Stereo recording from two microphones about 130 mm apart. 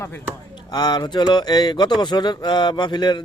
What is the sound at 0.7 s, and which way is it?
Speech, 30° left (ahead or behind).